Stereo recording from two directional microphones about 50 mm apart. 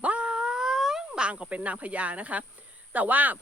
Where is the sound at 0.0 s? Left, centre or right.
Right; by 1.2 s centre.